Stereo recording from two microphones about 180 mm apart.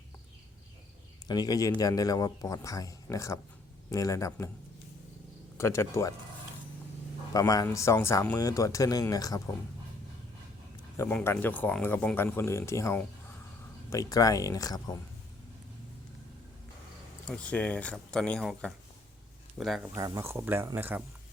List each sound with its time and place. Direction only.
1.3 s speech: 20° left (ahead or behind)
5.5 s speech: 15° left (ahead or behind)
7.3 s speech: 20° left (ahead or behind)
10.9 s speech: 10° left (ahead or behind)
17.5 s speech: 5° left (ahead or behind)
20.0 s speech: 20° right (ahead or behind)